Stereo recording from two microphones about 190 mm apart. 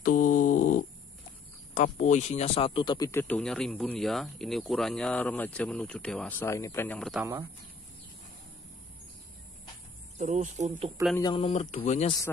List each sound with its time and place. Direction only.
0.0 s a sound: 45° left (ahead or behind)
1.7 s speech: 40° left (ahead or behind); by 7.2 s 5° left (ahead or behind)
7.2 s speech: 15° right (ahead or behind)
10.1 s speech: 40° right (ahead or behind)
11.1 s speech: 25° left (ahead or behind)